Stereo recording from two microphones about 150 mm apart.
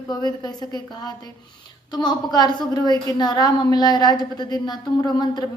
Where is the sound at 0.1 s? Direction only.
25° left (ahead or behind).